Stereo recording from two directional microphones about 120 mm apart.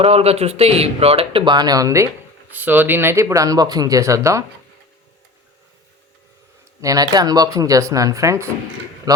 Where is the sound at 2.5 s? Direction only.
15° right (ahead or behind).